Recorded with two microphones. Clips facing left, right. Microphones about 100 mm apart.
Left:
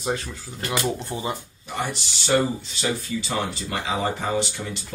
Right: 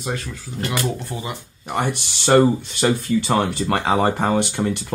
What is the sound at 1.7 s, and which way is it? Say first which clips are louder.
Speech: right 6 dB; 60° right (ahead or behind).